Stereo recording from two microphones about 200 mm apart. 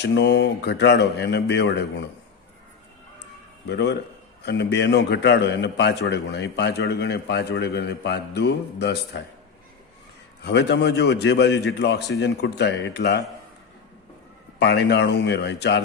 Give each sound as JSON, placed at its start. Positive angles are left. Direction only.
{"t": 0.0, "sound": "a man's voice", "side_deg": 60}
{"t": 3.7, "sound": "a man's voice", "side_deg": 60}
{"t": 10.4, "sound": "a man's voice", "side_deg": 60}
{"t": 14.6, "sound": "a man's voice", "side_deg": 60}